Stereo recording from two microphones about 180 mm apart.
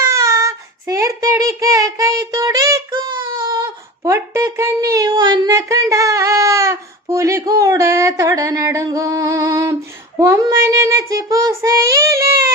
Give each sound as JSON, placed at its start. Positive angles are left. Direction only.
{"t": 0.0, "sound": "child singing", "side_deg": -15}